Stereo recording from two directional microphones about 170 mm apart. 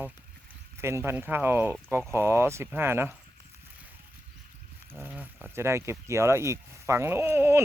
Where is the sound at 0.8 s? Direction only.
15° right (ahead or behind).